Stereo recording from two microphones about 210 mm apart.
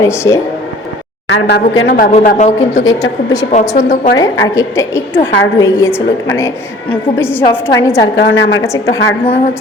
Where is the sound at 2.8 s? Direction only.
15° left (ahead or behind).